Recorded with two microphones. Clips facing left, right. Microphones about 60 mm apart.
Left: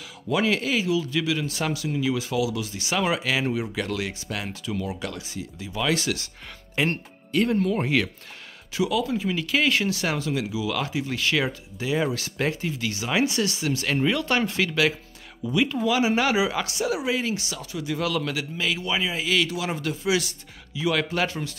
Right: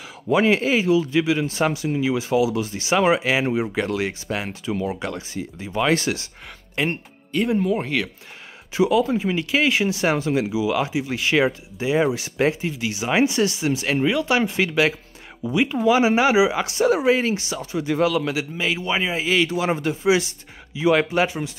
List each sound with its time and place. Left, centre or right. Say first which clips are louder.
0.3 s speech: right 5 dB; right
6.9 s speech: right 1 dB; centre
7.8 s speech: left 1 dB; centre
8.7 s speech: right 6 dB; right
9.5 s speech: right 2 dB; centre
9.9 s speech: right 6 dB; right; by 14.5 s centre
14.5 s speech: right 3 dB; right
16.7 s speech: right 7 dB; right
18.1 s speech: right 4 dB; right